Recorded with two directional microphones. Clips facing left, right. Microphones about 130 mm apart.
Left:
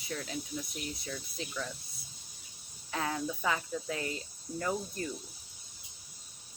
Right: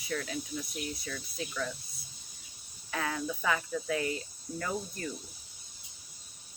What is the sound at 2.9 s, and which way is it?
Speech, 25° left (ahead or behind).